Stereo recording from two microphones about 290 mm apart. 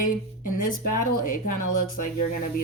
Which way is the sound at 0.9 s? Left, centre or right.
Left.